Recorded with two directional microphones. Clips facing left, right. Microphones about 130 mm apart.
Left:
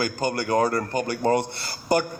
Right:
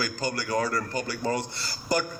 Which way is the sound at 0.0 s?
55° left (ahead or behind).